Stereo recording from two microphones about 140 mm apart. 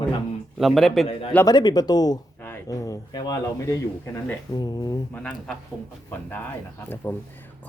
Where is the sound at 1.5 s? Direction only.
30° left (ahead or behind).